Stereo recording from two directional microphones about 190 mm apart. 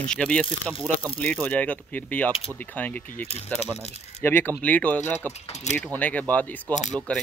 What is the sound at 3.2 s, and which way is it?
Speech, 35° left (ahead or behind).